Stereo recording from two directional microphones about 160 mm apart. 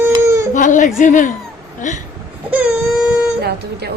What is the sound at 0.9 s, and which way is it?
A woman's voice, 55° left (ahead or behind).